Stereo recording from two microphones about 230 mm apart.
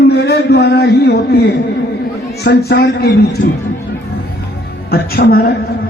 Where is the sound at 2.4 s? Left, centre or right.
Left.